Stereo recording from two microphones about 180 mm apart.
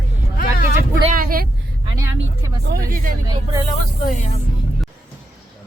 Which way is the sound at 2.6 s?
55° right (ahead or behind).